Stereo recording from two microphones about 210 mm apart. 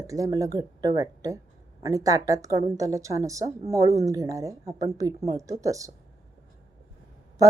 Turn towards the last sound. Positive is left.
turn(degrees=-15)  # may be behind; listen again after turning